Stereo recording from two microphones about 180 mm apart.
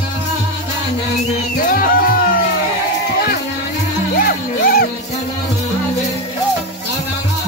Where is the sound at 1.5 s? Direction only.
50° left (ahead or behind).